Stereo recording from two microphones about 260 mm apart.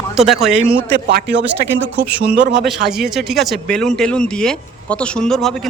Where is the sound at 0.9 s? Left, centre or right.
Right.